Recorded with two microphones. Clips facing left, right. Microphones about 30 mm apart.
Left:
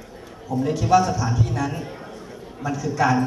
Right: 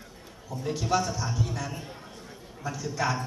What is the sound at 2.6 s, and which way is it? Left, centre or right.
Speech, left.